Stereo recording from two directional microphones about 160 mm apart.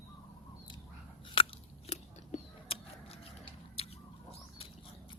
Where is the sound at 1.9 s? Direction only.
40° left (ahead or behind).